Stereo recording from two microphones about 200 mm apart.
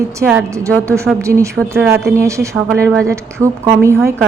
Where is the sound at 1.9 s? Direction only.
15° right (ahead or behind).